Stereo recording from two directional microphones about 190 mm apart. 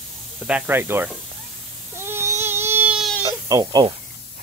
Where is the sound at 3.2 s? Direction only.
20° right (ahead or behind).